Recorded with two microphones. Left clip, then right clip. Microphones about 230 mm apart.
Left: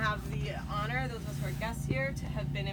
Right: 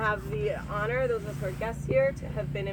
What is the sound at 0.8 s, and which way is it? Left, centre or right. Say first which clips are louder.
Speech: right 7 dB; left.